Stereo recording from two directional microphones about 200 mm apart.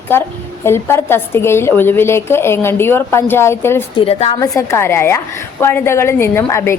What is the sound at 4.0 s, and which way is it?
Speech, 30° left (ahead or behind).